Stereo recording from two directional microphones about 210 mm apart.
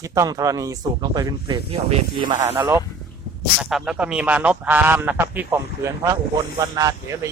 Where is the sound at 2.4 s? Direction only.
10° right (ahead or behind).